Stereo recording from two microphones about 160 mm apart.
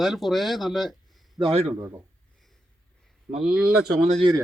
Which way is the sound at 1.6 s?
15° right (ahead or behind).